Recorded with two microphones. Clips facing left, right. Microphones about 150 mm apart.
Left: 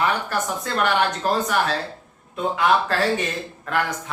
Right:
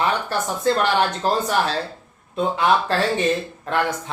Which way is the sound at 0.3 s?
30° right (ahead or behind).